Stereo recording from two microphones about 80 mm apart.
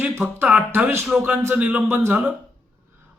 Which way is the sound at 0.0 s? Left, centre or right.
Right.